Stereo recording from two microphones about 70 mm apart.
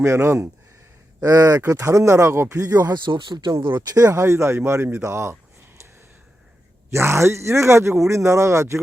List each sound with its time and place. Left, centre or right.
0.0 s speech: right
1.2 s speech: right
2.6 s speech: right
3.8 s speech: right
6.9 s speech: right